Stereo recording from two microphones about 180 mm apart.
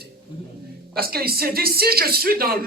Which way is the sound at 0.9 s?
55° right (ahead or behind).